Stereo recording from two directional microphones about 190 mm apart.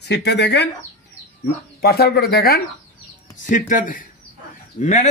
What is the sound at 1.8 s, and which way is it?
Speech, 55° left (ahead or behind).